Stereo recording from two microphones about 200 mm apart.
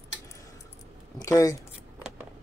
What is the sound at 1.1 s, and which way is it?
Speech, 15° left (ahead or behind).